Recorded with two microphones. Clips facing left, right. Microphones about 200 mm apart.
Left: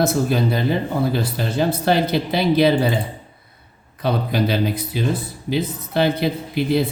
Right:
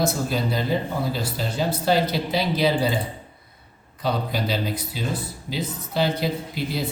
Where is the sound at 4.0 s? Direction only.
60° left (ahead or behind).